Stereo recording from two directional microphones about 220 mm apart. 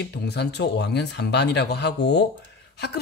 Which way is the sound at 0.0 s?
50° left (ahead or behind).